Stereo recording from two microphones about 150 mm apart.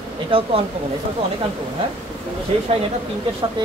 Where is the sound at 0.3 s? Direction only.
35° right (ahead or behind).